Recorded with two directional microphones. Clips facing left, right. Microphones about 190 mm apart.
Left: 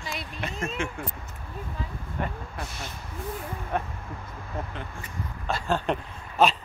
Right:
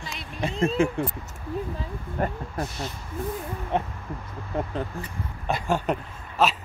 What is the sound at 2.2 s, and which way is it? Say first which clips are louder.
Speech: right 5 dB; 45° right (ahead or behind).